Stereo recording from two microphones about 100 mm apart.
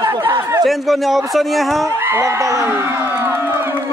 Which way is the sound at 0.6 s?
Centre (ahead or behind).